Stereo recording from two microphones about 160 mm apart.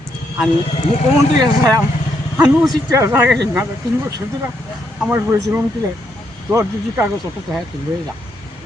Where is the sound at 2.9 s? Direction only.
15° right (ahead or behind).